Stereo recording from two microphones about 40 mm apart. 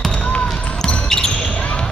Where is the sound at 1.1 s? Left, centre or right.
Centre.